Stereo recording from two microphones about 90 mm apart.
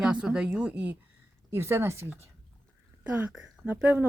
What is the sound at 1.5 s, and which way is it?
Speech, 30° right (ahead or behind).